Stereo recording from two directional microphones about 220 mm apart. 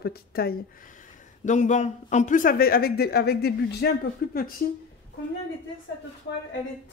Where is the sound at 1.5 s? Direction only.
35° left (ahead or behind).